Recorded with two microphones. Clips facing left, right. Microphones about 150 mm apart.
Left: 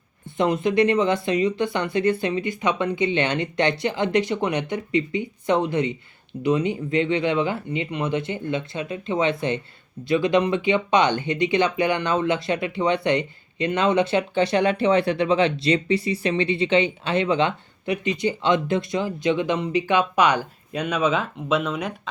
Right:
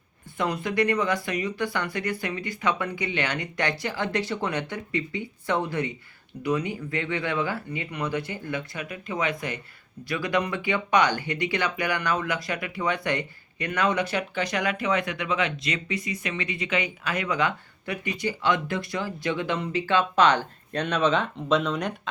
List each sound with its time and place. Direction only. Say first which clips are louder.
0.3 s speech: left 7 dB; 25° left (ahead or behind); by 22.1 s centre (ahead or behind)